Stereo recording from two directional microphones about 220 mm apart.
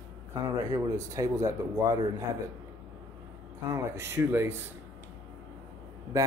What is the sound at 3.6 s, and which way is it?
Speech, 15° right (ahead or behind).